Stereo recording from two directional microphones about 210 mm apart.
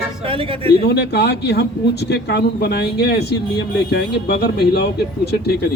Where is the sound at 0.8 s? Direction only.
50° left (ahead or behind).